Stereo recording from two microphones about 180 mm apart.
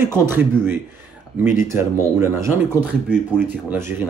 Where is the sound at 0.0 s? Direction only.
15° right (ahead or behind).